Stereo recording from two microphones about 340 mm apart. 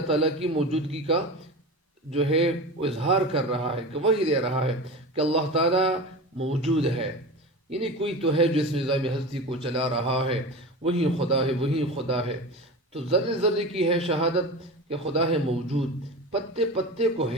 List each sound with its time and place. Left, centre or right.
0.1 s a man's voice: centre